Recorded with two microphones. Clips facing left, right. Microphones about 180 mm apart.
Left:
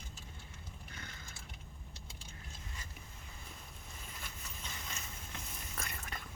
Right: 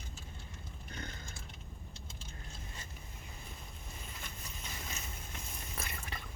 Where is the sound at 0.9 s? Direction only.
45° right (ahead or behind).